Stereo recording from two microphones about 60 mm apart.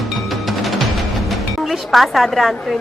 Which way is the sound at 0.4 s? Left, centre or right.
Centre.